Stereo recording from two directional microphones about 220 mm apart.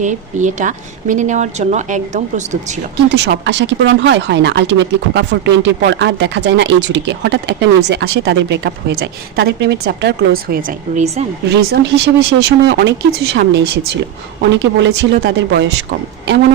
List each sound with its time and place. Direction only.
0.0 s a woman's voice: 35° right (ahead or behind)
3.1 s speech: 55° right (ahead or behind)
10.5 s a woman's voice: 30° right (ahead or behind)
11.4 s speech: 50° right (ahead or behind)